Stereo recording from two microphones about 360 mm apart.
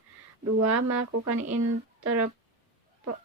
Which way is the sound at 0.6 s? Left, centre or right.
Right.